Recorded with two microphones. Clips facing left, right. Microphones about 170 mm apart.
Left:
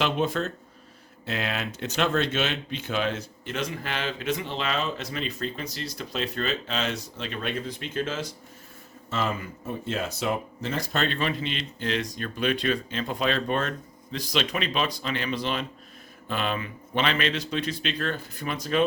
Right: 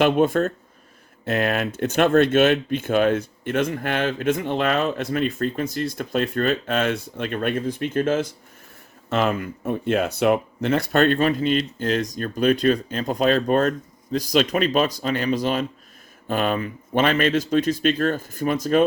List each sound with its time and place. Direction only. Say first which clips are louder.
0.0 s speech: right 8 dB; 50° right (ahead or behind)